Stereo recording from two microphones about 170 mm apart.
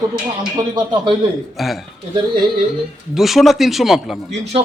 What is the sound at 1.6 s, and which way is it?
Speech, centre (ahead or behind).